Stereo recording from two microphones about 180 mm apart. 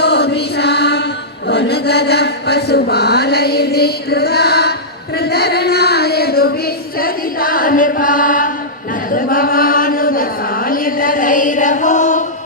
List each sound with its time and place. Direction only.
0.0 s music: 65° left (ahead or behind)
1.5 s chant: 70° left (ahead or behind)
5.2 s a sound: 65° left (ahead or behind)
7.0 s chant: 55° left (ahead or behind)